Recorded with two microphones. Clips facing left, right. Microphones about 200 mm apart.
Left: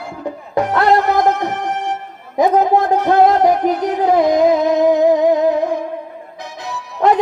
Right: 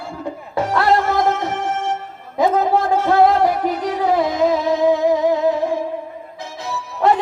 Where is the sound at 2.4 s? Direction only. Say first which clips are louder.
Left 3 dB; 15° left (ahead or behind).